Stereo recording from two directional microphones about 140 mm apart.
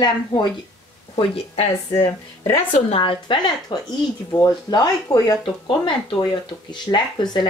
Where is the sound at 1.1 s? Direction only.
45° left (ahead or behind).